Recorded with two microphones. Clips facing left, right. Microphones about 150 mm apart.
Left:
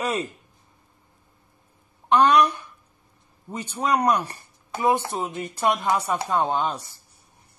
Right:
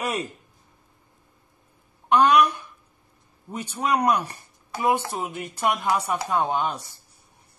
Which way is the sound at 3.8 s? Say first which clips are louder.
Left 1 dB; 10° right (ahead or behind).